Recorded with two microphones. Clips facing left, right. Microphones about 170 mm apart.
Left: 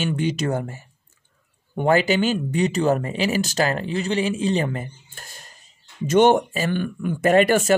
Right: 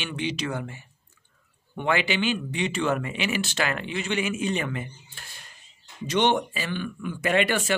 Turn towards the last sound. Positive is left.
turn(degrees=45)  # may be behind; listen again after turning